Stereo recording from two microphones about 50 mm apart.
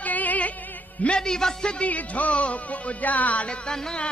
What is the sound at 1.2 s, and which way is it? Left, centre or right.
Speech, centre.